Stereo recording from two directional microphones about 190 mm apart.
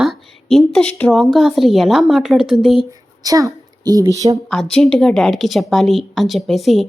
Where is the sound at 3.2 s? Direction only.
20° right (ahead or behind).